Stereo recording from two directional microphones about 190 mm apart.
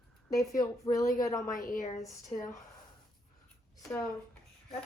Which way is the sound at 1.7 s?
40° left (ahead or behind).